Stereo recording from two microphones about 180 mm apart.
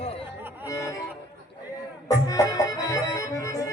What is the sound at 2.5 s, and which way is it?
Music, 20° left (ahead or behind).